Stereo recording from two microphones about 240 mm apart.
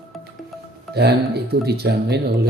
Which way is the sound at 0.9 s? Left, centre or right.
Right.